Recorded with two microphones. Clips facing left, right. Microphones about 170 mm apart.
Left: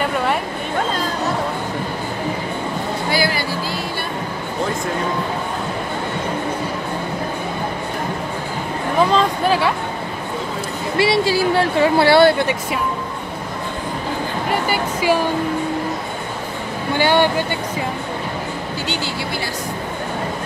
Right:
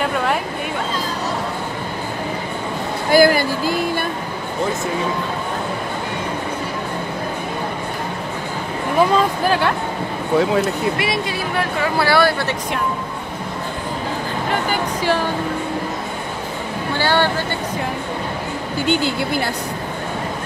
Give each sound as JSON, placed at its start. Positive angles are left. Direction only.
{"t": 0.0, "sound": "a sound", "side_deg": 0}
{"t": 3.1, "sound": "music", "side_deg": -50}
{"t": 9.1, "sound": "speech", "side_deg": 0}
{"t": 11.0, "sound": "speech", "side_deg": 30}
{"t": 14.5, "sound": "speech", "side_deg": 10}
{"t": 16.9, "sound": "speech", "side_deg": 15}
{"t": 18.9, "sound": "speech", "side_deg": -55}